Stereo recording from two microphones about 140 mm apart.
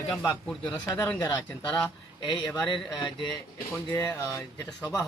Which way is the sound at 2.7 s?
35° left (ahead or behind).